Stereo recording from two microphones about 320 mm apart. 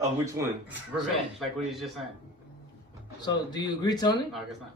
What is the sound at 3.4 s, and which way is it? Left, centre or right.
Speech, centre.